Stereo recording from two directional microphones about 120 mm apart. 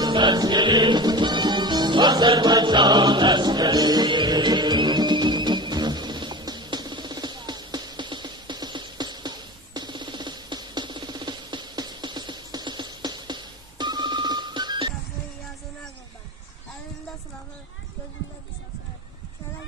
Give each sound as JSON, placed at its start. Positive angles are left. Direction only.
{"t": 0.0, "sound": "music", "side_deg": -40}